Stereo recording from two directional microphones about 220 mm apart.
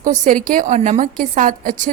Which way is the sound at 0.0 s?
35° right (ahead or behind).